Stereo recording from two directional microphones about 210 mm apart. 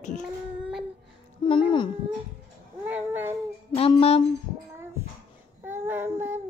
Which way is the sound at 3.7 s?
25° left (ahead or behind).